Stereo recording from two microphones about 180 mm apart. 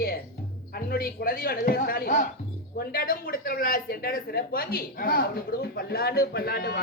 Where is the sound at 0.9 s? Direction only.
55° left (ahead or behind).